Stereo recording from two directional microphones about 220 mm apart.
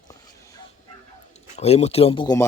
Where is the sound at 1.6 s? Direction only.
30° left (ahead or behind).